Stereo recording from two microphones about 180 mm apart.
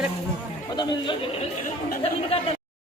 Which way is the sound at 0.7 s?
25° left (ahead or behind).